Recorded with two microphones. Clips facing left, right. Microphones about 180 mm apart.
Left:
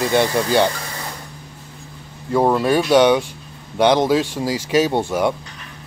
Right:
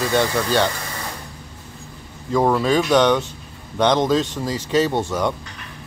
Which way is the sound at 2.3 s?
10° left (ahead or behind).